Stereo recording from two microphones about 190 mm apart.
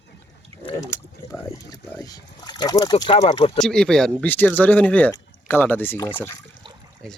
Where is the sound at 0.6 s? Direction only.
25° left (ahead or behind).